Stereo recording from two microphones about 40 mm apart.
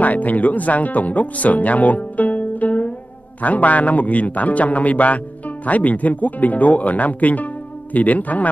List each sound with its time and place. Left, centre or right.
0.0 s speech: left